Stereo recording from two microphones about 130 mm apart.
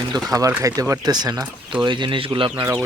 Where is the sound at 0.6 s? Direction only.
25° right (ahead or behind).